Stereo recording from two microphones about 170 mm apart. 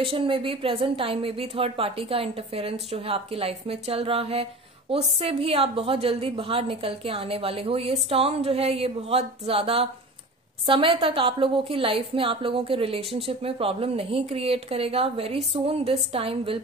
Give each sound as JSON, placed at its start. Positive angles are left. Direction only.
{"t": 0.0, "sound": "a woman's voice", "side_deg": -30}